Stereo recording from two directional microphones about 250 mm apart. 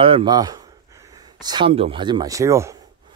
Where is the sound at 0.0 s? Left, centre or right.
Centre.